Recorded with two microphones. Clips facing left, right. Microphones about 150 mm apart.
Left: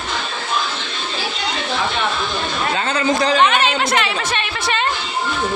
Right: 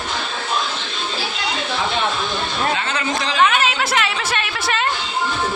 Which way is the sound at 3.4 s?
5° right (ahead or behind).